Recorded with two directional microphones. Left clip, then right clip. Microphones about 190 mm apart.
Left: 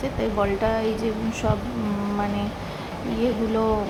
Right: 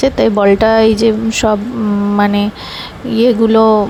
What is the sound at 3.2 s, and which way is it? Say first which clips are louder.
Speech: right 14 dB; 45° right (ahead or behind).